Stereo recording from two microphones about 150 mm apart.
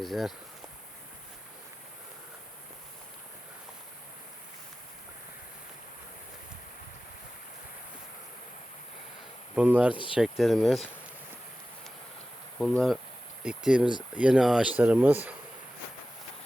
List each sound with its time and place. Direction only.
0.0 s speech: centre (ahead or behind)
9.6 s speech: 10° right (ahead or behind)
9.9 s speech: 35° left (ahead or behind)
10.2 s speech: centre (ahead or behind)
12.5 s speech: centre (ahead or behind)